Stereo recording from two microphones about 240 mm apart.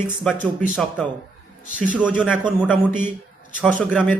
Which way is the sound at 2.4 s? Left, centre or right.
Centre.